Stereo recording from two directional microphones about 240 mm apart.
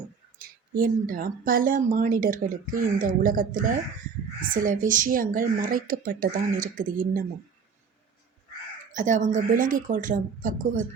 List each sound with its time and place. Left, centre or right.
0.3 s speech: right
9.0 s speech: right